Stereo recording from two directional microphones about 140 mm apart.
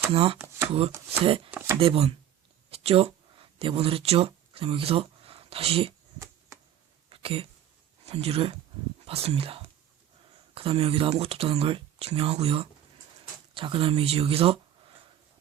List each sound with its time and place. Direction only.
0.1 s speech: 45° right (ahead or behind)
0.3 s speech: 15° right (ahead or behind)
0.7 s speech: 45° right (ahead or behind)
1.5 s speech: 15° right (ahead or behind)
1.8 s speech: 40° right (ahead or behind)
2.6 s a sound: 45° right (ahead or behind)
7.1 s a sound: 45° right (ahead or behind)
8.0 s speech: 45° right (ahead or behind)